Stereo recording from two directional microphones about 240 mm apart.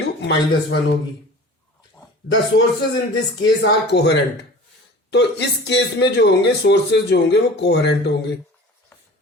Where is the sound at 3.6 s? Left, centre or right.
Left.